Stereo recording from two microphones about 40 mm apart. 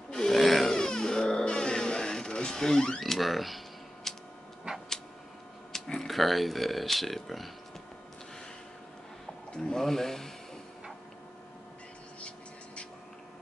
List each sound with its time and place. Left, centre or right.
0.1 s a sound: centre
0.4 s a sound: centre
0.7 s cat: centre
3.0 s camera: centre
5.7 s speech: centre
9.5 s speech: centre
12.2 s vehicle: left